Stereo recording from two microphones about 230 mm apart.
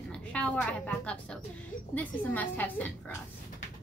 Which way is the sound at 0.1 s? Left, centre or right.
Centre.